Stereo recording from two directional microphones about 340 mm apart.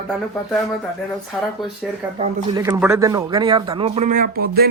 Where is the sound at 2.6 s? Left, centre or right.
Centre.